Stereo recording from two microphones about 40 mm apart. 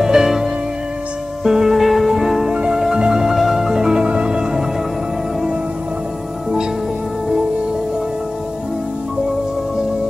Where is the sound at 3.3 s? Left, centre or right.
Centre.